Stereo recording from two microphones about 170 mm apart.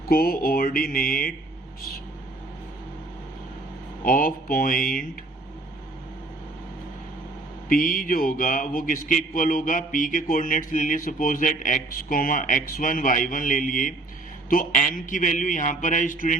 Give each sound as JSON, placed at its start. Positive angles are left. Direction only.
{"t": 0.1, "sound": "mantra", "side_deg": 60}
{"t": 4.0, "sound": "mantra", "side_deg": 55}
{"t": 7.7, "sound": "a man's voice", "side_deg": 55}